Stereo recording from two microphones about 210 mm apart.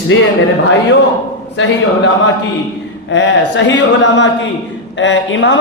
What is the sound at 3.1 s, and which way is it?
A man's voice, 60° left (ahead or behind).